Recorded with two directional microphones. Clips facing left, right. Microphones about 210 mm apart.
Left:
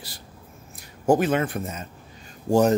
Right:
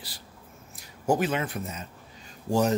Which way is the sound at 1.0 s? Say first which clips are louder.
Left 5 dB; 50° left (ahead or behind).